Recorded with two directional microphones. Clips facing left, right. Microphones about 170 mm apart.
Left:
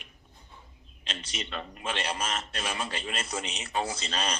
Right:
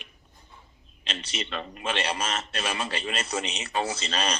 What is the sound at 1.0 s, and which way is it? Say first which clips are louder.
A man's voice: right 4 dB; 80° right.